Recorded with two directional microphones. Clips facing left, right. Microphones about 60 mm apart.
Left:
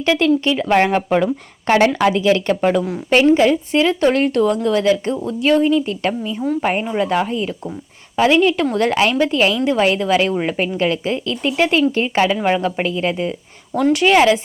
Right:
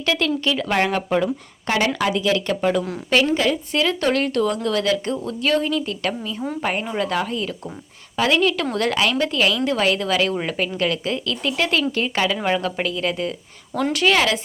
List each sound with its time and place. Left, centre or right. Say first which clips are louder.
0.0 s speech: left 6 dB; left
1.1 s speech: left 4 dB; left; by 14.4 s centre